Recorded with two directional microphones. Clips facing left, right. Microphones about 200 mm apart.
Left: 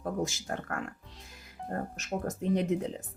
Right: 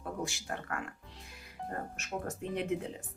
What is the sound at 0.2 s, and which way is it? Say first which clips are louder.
Speech: left 5 dB; 40° left (ahead or behind).